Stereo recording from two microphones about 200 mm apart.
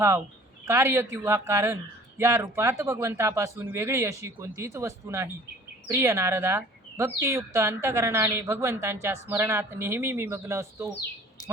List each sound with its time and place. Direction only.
0.7 s speech: 15° right (ahead or behind)
11.4 s a woman's voice: 15° left (ahead or behind)